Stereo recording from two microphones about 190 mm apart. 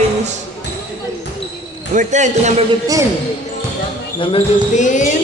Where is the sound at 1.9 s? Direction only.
40° right (ahead or behind).